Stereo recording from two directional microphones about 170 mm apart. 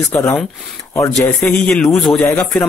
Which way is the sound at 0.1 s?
15° left (ahead or behind).